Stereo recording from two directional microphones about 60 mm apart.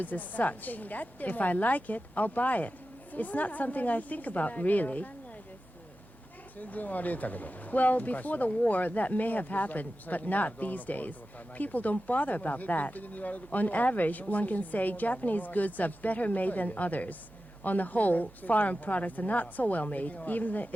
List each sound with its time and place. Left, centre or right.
0.0 s speech: left
6.6 s speech: left